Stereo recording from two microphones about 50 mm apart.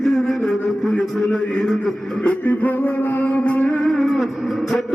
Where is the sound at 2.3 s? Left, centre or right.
Left.